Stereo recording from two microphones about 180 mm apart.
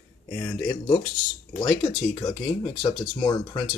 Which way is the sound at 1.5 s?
25° left (ahead or behind).